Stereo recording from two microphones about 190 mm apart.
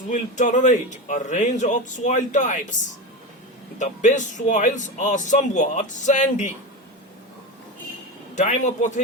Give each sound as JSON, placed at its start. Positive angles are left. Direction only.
{"t": 0.1, "sound": "speech", "side_deg": 40}
{"t": 3.8, "sound": "speech", "side_deg": 40}
{"t": 8.4, "sound": "speech", "side_deg": 40}